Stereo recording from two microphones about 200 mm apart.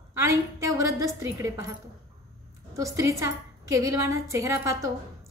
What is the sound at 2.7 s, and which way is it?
A woman's voice, 15° right (ahead or behind).